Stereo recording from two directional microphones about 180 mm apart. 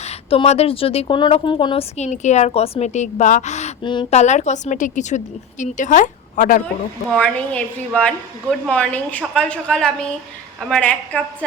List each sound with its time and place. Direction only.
0.0 s a woman's voice: 35° left (ahead or behind)
7.1 s a woman's voice: 5° left (ahead or behind)